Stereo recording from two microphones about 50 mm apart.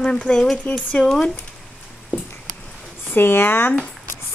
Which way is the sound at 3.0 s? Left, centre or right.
Left.